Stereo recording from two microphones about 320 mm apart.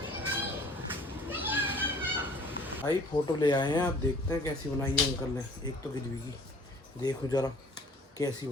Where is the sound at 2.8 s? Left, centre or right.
Centre.